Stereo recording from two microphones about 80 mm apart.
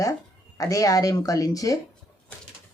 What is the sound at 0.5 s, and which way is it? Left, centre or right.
Speech, left.